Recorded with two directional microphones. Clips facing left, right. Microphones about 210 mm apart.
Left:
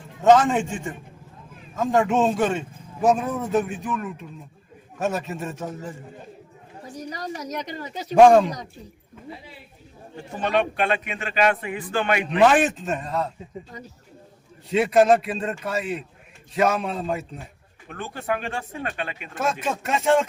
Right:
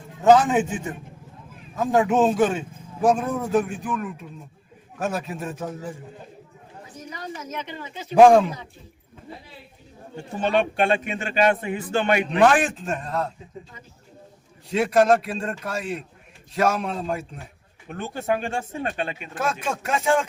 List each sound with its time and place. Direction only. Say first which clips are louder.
0.2 s a man's voice: even; centre (ahead or behind)
1.7 s a man's voice: right 1 dB; 5° right (ahead or behind)
6.9 s a sound: left 3 dB; 35° left (ahead or behind)
8.1 s a man's voice: even; centre (ahead or behind)
10.8 s a man's voice: right 3 dB; 30° right (ahead or behind)
12.4 s a man's voice: left 2 dB; centre (ahead or behind)
14.7 s a man's voice: left 1 dB; 5° left (ahead or behind)
17.8 s a man's voice: right 3 dB; 25° right (ahead or behind)
19.4 s a man's voice: left 1 dB; centre (ahead or behind)